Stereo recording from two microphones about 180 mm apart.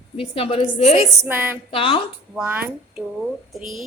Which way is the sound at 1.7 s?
30° left (ahead or behind).